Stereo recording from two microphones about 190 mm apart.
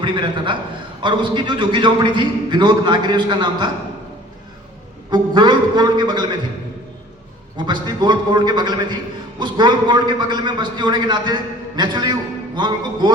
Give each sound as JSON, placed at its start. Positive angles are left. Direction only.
{"t": 0.0, "sound": "a man's voice", "side_deg": -25}
{"t": 5.1, "sound": "a man's voice", "side_deg": -25}
{"t": 7.5, "sound": "a man's voice", "side_deg": -25}